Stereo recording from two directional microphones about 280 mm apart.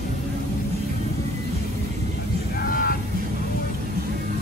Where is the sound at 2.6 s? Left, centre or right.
Left.